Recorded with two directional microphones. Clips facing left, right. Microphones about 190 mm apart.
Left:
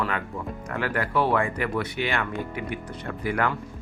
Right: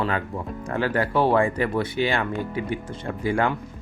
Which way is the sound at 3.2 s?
25° right (ahead or behind).